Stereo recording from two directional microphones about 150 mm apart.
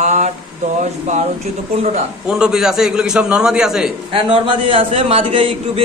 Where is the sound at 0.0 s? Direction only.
50° right (ahead or behind).